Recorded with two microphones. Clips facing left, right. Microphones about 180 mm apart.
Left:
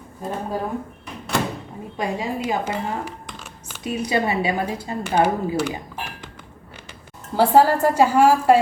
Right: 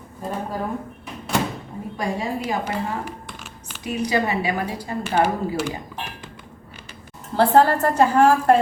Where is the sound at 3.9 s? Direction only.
25° left (ahead or behind).